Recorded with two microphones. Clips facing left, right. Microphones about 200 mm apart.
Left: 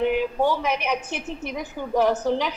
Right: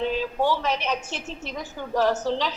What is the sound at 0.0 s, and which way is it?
A woman's voice, 15° left (ahead or behind).